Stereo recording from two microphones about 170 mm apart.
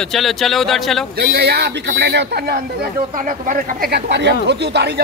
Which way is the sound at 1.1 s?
70° right (ahead or behind).